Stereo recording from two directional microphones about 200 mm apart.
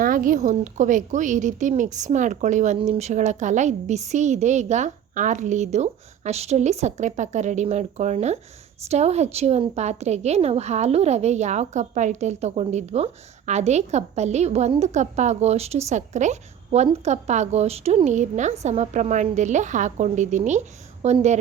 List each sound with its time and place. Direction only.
0.0 s a woman's voice: 45° right (ahead or behind)